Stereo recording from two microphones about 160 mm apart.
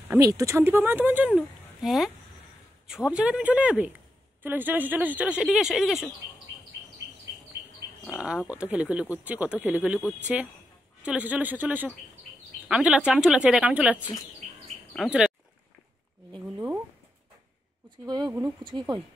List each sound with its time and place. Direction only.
0.1 s speech: 20° right (ahead or behind); by 6.0 s centre (ahead or behind)
8.1 s speech: 10° right (ahead or behind)
16.5 s speech: 10° right (ahead or behind)
18.0 s speech: 25° right (ahead or behind)